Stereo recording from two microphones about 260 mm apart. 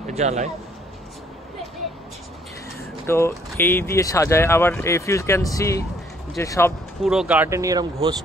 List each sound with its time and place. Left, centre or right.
0.0 s speech: right
3.1 s speech: centre
7.0 s speech: centre